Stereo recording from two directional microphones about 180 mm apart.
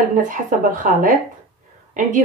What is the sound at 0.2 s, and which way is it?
A woman's voice, 45° right (ahead or behind).